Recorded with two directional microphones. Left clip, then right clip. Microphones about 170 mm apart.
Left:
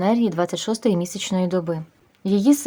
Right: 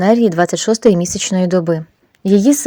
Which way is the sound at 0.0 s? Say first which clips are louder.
Right 8 dB; 30° right (ahead or behind).